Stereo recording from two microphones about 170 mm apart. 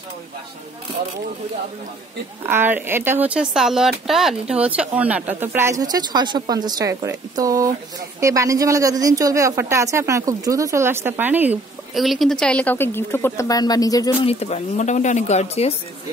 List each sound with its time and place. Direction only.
2.4 s speech: 10° right (ahead or behind)
11.9 s a woman's voice: centre (ahead or behind); by 14.1 s 20° left (ahead or behind)
14.2 s speech: 40° left (ahead or behind)